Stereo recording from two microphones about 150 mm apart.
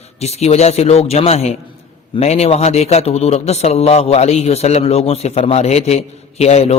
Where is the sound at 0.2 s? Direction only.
45° left (ahead or behind).